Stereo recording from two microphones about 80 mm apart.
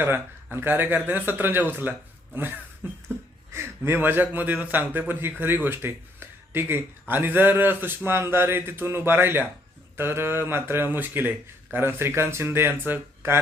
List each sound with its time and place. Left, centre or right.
0.5 s speech: right